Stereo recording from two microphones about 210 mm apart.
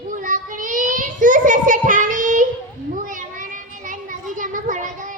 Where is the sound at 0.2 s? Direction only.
40° right (ahead or behind).